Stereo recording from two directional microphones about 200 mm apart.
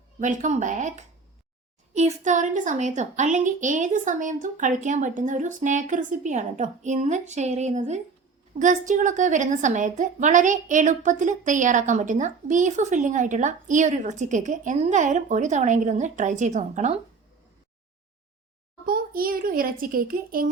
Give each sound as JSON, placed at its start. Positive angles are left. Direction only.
{"t": 0.2, "sound": "a woman's voice", "side_deg": -40}
{"t": 18.9, "sound": "a child's voice", "side_deg": -45}